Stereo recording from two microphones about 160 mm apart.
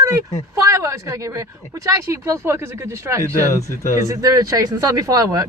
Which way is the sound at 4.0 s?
20° right (ahead or behind).